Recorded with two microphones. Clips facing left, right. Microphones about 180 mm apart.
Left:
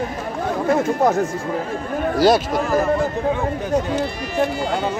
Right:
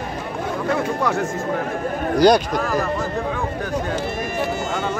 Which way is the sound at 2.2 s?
5° left (ahead or behind).